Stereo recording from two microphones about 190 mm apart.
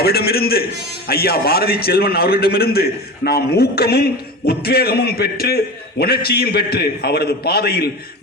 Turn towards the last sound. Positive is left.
turn(degrees=55)  # may be behind; listen again after turning